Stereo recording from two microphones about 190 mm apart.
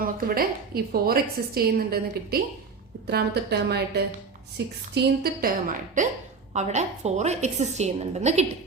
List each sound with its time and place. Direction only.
0.0 s a woman's voice: 50° right (ahead or behind)